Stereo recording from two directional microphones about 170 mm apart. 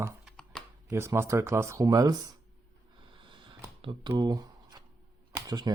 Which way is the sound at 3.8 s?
30° right (ahead or behind).